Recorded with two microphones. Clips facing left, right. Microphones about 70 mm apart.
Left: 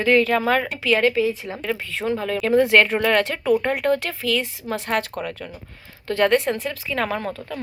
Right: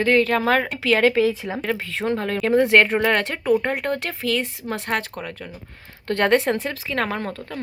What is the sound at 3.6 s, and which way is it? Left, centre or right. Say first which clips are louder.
Speech: left 3 dB; right.